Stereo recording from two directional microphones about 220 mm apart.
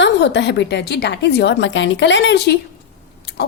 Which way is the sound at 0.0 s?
50° left (ahead or behind).